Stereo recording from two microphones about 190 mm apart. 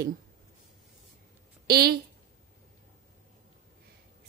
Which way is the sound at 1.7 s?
55° right (ahead or behind).